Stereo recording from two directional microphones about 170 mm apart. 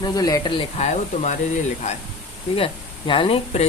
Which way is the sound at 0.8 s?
45° left (ahead or behind).